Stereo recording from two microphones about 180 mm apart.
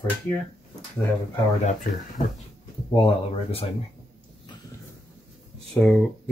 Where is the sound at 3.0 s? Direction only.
35° left (ahead or behind).